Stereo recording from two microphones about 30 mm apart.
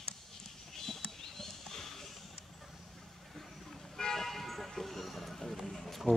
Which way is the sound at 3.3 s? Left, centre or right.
Centre.